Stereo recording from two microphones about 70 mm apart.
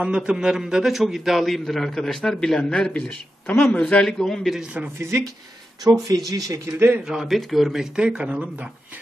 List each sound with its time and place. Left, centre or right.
0.0 s a man's voice: centre
3.4 s speech: left
3.9 s a man's voice: centre
4.8 s speech: right
6.0 s speech: right
7.1 s speech: centre